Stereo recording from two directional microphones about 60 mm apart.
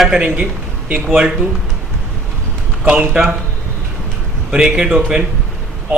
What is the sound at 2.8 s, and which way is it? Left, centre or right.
Speech, right.